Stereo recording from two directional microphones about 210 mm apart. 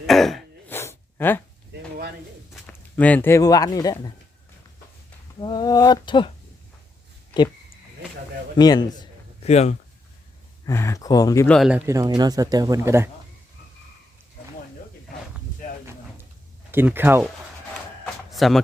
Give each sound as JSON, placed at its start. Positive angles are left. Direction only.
{"t": 0.1, "sound": "throat clearing", "side_deg": 0}
{"t": 0.8, "sound": "a sound", "side_deg": 10}
{"t": 2.5, "sound": "speech", "side_deg": 5}
{"t": 5.4, "sound": "speech", "side_deg": 20}
{"t": 8.5, "sound": "a sound", "side_deg": 20}
{"t": 9.5, "sound": "speech", "side_deg": 30}
{"t": 10.7, "sound": "speech", "side_deg": 15}
{"t": 11.4, "sound": "speech", "side_deg": 0}
{"t": 11.9, "sound": "speech", "side_deg": -15}
{"t": 16.7, "sound": "speech", "side_deg": -10}
{"t": 18.3, "sound": "a sound", "side_deg": 0}